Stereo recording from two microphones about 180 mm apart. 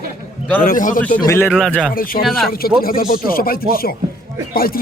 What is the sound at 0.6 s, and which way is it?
Speech, 50° left (ahead or behind).